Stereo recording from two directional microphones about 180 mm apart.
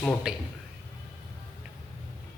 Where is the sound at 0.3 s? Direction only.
5° right (ahead or behind).